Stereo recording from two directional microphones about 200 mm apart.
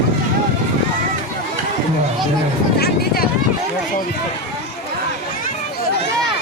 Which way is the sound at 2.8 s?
50° left (ahead or behind).